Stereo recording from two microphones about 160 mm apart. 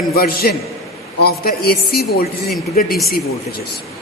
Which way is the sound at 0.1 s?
70° left (ahead or behind).